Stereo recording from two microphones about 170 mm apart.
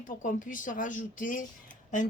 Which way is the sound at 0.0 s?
50° left (ahead or behind).